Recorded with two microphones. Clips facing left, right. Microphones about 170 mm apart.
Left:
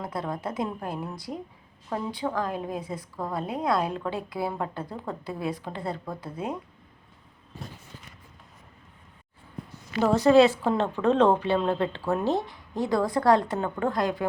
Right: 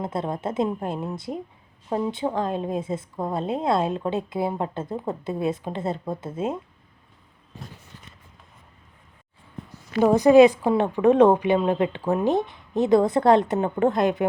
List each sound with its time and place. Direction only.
0.0 s a woman's voice: 25° right (ahead or behind)
10.0 s a woman's voice: 15° right (ahead or behind)